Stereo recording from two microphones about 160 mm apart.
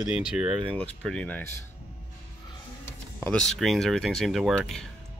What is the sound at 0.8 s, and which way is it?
Speech, 5° left (ahead or behind).